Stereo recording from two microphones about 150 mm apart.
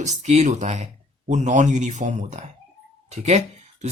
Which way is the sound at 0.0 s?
50° right (ahead or behind).